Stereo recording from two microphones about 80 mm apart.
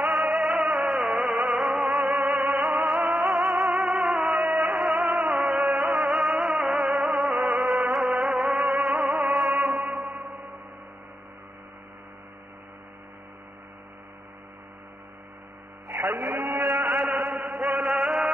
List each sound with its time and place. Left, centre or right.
0.0 s music: centre
15.9 s a sound: right
16.9 s chant: centre